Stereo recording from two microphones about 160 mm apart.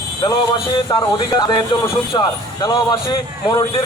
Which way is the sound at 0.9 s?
25° left (ahead or behind).